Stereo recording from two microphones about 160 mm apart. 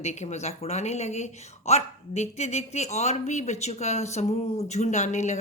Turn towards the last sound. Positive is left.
turn(degrees=45)  # may be behind; listen again after turning